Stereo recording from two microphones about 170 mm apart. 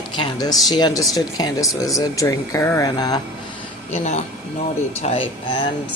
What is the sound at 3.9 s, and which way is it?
Speech, 40° left (ahead or behind).